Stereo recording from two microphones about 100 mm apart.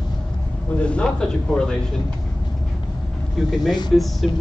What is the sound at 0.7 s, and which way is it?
Speech, 10° left (ahead or behind).